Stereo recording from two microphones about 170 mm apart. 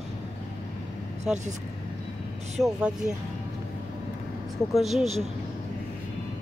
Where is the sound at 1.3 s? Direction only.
5° right (ahead or behind).